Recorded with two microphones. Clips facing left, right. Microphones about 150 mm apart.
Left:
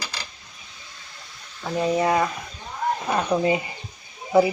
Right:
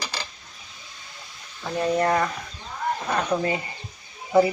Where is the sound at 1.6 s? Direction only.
5° left (ahead or behind).